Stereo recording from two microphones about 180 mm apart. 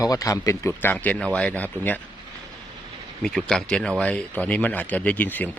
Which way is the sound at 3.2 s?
Centre (ahead or behind).